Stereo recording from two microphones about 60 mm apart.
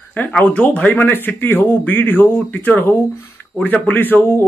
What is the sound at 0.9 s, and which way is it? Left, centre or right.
A man's voice, left.